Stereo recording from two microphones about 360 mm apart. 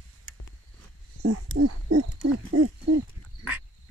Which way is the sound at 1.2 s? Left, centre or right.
Right.